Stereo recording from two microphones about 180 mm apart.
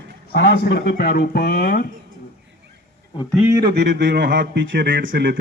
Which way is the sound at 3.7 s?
70° right (ahead or behind).